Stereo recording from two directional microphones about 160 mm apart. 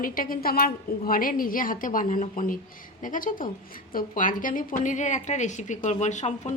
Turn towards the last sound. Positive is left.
turn(degrees=45)  # may be behind; listen again after turning